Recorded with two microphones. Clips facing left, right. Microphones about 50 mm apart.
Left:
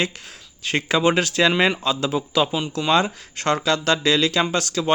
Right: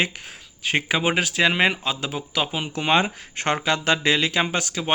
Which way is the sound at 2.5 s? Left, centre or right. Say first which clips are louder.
Left 2 dB; right.